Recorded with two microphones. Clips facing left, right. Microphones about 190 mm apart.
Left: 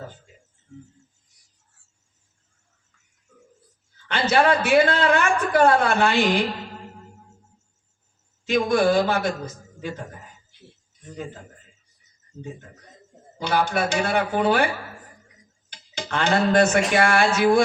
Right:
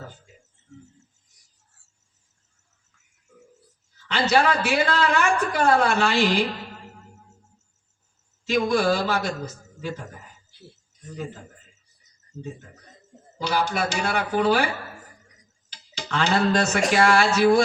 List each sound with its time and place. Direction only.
4.1 s a man's voice: 55° left (ahead or behind)
8.4 s a man's voice: 55° left (ahead or behind)
13.4 s a man's voice: 55° left (ahead or behind)
15.7 s speech: 55° left (ahead or behind)